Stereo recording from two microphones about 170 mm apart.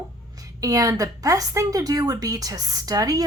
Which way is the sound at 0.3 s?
20° right (ahead or behind).